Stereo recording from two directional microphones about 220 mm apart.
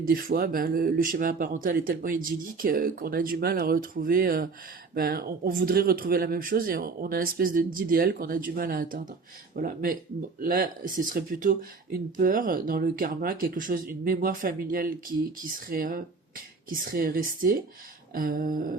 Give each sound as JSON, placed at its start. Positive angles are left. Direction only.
{"t": 0.0, "sound": "speech", "side_deg": -40}